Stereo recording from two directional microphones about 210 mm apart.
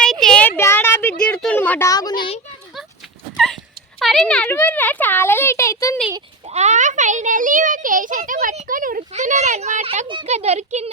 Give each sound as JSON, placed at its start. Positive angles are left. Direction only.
{"t": 0.0, "sound": "a sound", "side_deg": 5}
{"t": 3.3, "sound": "dog", "side_deg": 0}
{"t": 4.0, "sound": "a child's voice", "side_deg": 0}
{"t": 6.5, "sound": "a child's voice", "side_deg": -35}